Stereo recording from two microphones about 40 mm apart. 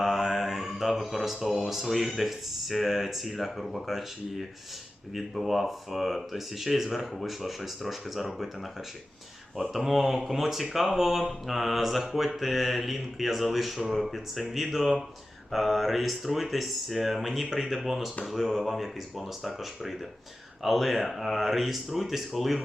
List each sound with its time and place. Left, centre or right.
0.0 s speech: centre
9.6 s speech: centre